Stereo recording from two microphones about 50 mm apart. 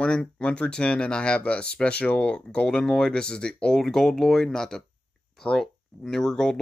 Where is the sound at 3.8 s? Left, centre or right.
Centre.